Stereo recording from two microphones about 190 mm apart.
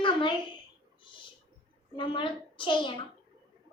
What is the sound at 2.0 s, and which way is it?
A child's voice, 25° left (ahead or behind).